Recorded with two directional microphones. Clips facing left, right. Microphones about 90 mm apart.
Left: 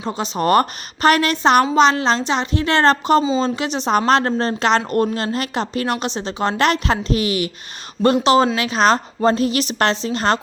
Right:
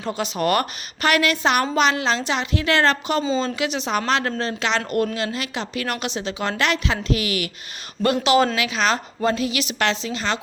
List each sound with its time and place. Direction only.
0.0 s a woman's voice: 25° left (ahead or behind); by 10.4 s 45° left (ahead or behind)